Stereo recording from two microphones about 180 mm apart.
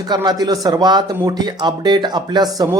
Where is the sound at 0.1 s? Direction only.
20° right (ahead or behind).